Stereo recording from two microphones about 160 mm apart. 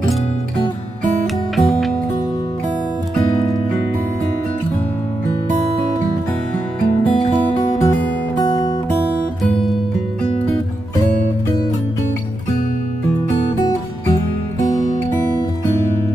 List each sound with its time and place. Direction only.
1.2 s music: centre (ahead or behind)
7.1 s music: 35° left (ahead or behind)
8.4 s music: 25° left (ahead or behind)
9.4 s music: centre (ahead or behind)